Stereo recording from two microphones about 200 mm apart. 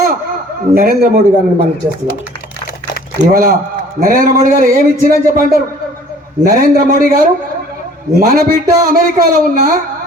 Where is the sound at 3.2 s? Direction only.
45° right (ahead or behind).